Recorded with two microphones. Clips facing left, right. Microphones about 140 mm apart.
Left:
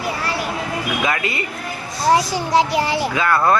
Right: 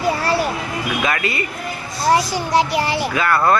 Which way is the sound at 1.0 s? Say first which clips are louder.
Right 2 dB; 20° left (ahead or behind).